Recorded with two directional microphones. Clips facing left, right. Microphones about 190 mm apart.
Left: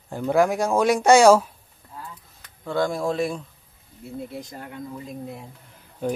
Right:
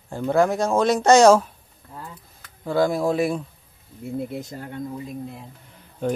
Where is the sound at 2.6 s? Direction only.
5° right (ahead or behind).